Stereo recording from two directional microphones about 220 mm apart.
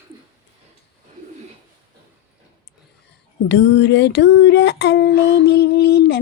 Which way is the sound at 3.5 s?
50° left (ahead or behind).